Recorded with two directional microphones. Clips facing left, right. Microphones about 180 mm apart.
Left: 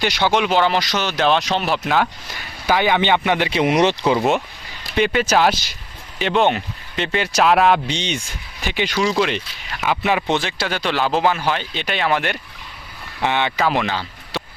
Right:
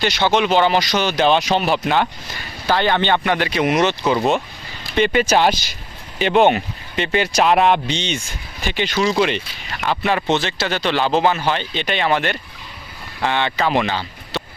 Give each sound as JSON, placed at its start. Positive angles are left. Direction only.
{"t": 0.0, "sound": "speech", "side_deg": 10}
{"t": 6.1, "sound": "speech", "side_deg": -5}
{"t": 7.9, "sound": "speech", "side_deg": 15}
{"t": 13.2, "sound": "speech", "side_deg": 15}
{"t": 13.6, "sound": "speech", "side_deg": 0}